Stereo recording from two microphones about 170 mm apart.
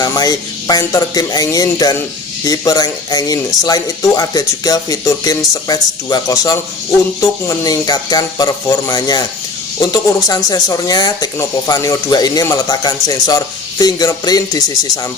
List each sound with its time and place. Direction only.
0.0 s speech: 20° left (ahead or behind)